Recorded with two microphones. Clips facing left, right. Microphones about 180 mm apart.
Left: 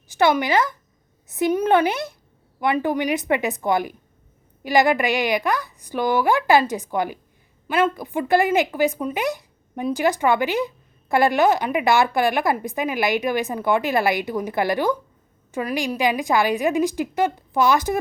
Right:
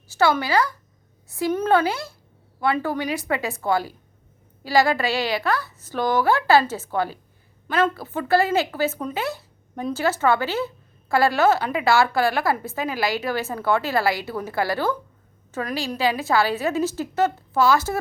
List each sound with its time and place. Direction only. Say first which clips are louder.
0.1 s a woman's voice: left 2 dB; 20° left (ahead or behind)